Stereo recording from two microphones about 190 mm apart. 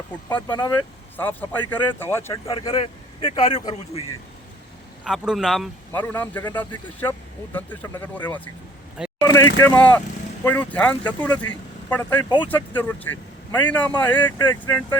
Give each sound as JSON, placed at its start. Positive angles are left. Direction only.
{"t": 0.4, "sound": "speech", "side_deg": 20}
{"t": 0.7, "sound": "speech", "side_deg": 10}
{"t": 2.6, "sound": "speech", "side_deg": 25}
{"t": 5.0, "sound": "speech", "side_deg": -5}
{"t": 9.0, "sound": "vehicle", "side_deg": -5}
{"t": 9.6, "sound": "speech", "side_deg": 10}